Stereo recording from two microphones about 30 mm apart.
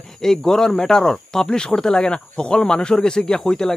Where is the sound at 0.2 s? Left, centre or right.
Centre.